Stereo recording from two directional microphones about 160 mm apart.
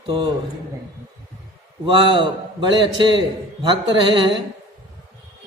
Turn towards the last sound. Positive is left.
turn(degrees=-30)  # may be behind; listen again after turning